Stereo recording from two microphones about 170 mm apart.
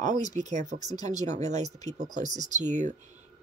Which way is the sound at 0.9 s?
20° left (ahead or behind).